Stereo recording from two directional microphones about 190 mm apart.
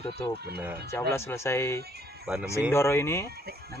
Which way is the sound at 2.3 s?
10° right (ahead or behind).